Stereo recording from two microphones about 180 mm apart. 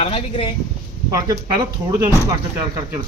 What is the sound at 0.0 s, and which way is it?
Speech, 30° left (ahead or behind).